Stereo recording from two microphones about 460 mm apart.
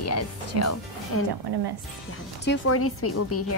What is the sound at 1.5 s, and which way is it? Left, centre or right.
Speech, right.